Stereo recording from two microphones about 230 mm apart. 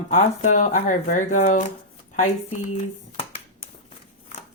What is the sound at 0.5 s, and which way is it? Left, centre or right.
Speech, left.